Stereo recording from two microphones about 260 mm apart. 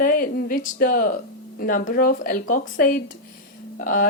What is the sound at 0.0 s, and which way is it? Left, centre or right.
A woman's voice, left.